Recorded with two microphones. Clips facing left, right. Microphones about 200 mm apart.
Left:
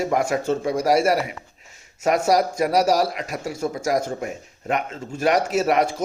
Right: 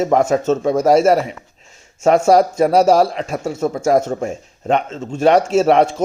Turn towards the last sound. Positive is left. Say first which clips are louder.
# right 7 dB
turn(degrees=-25)  # may be behind; listen again after turning